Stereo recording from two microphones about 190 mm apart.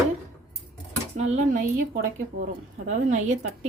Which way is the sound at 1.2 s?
40° right (ahead or behind).